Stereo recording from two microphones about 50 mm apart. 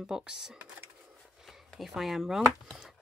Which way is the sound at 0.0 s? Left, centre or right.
Centre.